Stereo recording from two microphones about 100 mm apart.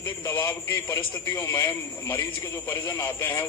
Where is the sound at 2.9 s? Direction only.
25° left (ahead or behind).